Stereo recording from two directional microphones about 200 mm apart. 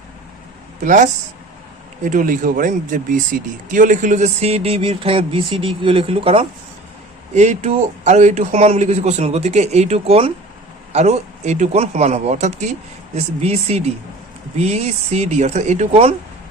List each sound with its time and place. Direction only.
0.9 s speech: 40° right (ahead or behind)